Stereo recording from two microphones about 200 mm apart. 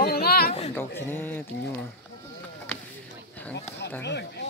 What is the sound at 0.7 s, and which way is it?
Speech, 10° left (ahead or behind).